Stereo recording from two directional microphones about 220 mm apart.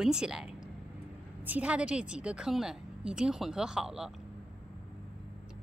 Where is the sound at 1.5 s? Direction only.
5° right (ahead or behind).